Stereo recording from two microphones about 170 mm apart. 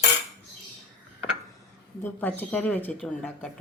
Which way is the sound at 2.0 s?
10° left (ahead or behind).